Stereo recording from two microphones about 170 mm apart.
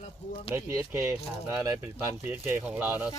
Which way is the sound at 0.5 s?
15° right (ahead or behind).